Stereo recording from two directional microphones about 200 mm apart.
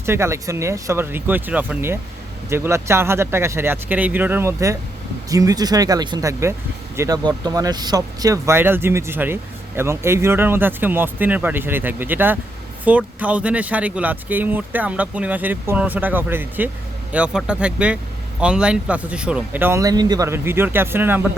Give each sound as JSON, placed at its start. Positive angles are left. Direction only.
{"t": 0.0, "sound": "speech", "side_deg": -15}